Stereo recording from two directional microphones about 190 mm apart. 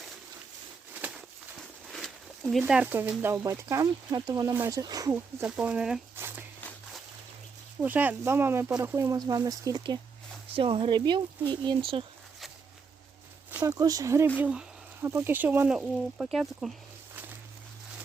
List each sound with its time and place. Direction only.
0.9 s speech: 5° right (ahead or behind)
5.5 s speech: 5° right (ahead or behind)
6.6 s walk: 10° left (ahead or behind)
7.8 s speech: 10° right (ahead or behind); by 12.0 s 30° right (ahead or behind)
13.5 s speech: 10° right (ahead or behind)